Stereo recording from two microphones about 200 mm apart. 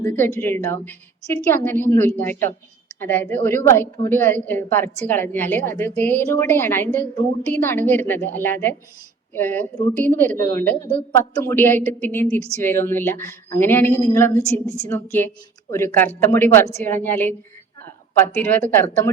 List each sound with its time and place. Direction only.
0.0 s a woman's voice: 10° left (ahead or behind)
15.7 s a woman's voice: 10° left (ahead or behind)